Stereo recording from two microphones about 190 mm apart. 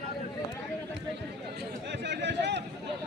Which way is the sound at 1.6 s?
65° right (ahead or behind).